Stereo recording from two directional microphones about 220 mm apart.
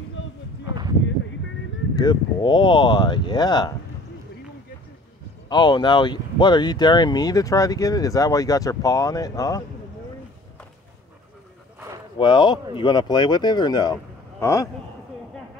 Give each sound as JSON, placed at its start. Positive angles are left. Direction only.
{"t": 2.0, "sound": "speech", "side_deg": 20}
{"t": 5.5, "sound": "speech", "side_deg": 20}
{"t": 12.2, "sound": "speech", "side_deg": 20}